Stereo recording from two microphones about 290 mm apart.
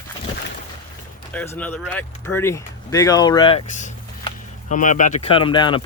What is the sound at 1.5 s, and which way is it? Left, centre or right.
Speech, centre.